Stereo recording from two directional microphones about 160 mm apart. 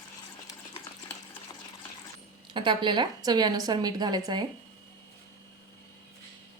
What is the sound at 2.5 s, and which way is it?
A woman's voice, 30° right (ahead or behind).